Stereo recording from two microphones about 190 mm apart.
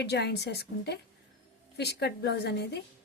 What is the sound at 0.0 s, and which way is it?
A woman's voice, 60° left (ahead or behind).